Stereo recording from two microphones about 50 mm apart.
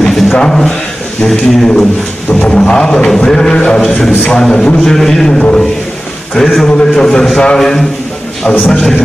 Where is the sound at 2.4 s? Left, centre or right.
Centre.